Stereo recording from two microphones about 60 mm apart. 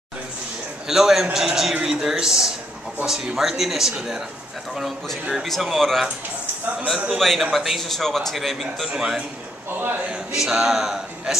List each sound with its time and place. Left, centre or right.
0.8 s speech: centre
5.3 s speech: centre
7.1 s speech: centre
9.7 s a man's voice: right
10.1 s speech: centre